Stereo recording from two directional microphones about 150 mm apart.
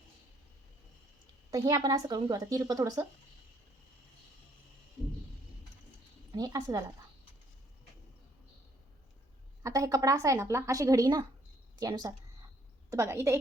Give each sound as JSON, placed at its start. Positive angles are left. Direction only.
{"t": 1.5, "sound": "a woman's voice", "side_deg": -25}
{"t": 6.3, "sound": "a woman's voice", "side_deg": -25}
{"t": 9.6, "sound": "a woman's voice", "side_deg": -20}